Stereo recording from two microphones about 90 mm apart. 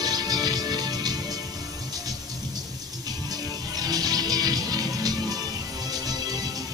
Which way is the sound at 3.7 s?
45° right (ahead or behind).